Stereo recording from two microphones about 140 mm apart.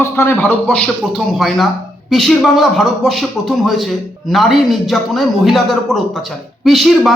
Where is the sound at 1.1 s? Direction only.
Centre (ahead or behind).